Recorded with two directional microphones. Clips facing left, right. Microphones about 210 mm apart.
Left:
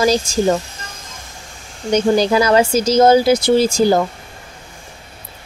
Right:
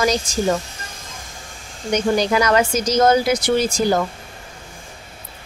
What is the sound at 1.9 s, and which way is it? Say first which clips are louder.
Speech: left 4 dB; 30° left (ahead or behind).